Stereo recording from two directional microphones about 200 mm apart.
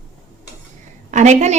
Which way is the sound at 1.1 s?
35° right (ahead or behind).